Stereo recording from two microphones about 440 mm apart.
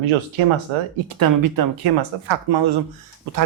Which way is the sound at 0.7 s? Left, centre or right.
Right.